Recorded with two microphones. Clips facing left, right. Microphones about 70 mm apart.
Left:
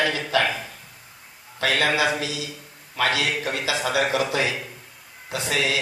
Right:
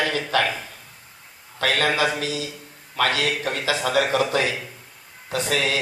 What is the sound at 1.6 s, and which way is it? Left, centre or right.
Speech, right.